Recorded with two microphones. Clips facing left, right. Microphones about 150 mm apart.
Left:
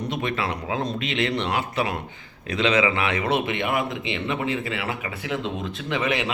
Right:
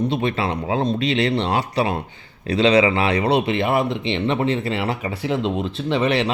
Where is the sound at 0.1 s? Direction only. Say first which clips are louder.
Right 5 dB; 30° right (ahead or behind).